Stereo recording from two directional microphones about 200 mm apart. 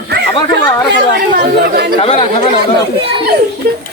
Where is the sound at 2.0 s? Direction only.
30° left (ahead or behind).